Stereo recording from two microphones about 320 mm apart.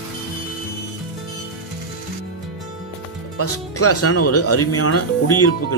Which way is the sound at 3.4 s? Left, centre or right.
Left.